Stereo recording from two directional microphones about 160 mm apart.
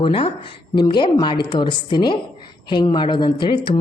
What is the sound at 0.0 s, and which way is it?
A woman's voice, 35° left (ahead or behind).